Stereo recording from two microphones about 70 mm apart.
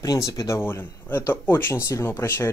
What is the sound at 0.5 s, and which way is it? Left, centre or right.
Speech, left.